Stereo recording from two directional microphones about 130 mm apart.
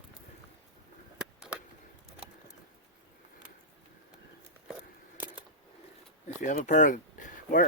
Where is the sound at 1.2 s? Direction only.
5° right (ahead or behind).